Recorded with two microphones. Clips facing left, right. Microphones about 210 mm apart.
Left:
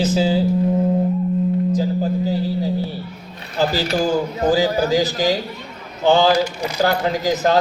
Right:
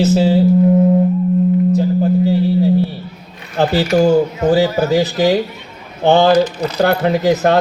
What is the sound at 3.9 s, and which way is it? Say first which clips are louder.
Speech: right 10 dB; 60° right (ahead or behind).